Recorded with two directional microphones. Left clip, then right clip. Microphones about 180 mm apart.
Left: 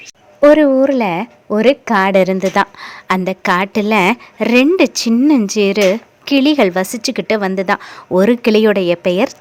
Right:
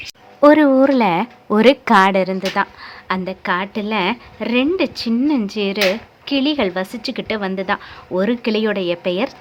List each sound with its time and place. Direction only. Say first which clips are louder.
0.3 s speech: left 2 dB; 10° left (ahead or behind)
2.1 s a woman's voice: left 6 dB; 30° left (ahead or behind)